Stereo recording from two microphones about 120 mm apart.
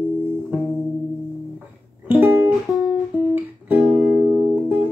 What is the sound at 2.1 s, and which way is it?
Music, 20° right (ahead or behind).